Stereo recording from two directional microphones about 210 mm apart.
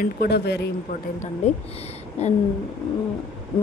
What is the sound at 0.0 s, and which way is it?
Speech, 50° left (ahead or behind).